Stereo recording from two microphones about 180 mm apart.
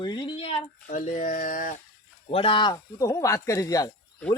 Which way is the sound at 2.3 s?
30° left (ahead or behind).